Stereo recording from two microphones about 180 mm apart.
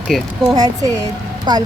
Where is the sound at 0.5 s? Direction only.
20° right (ahead or behind).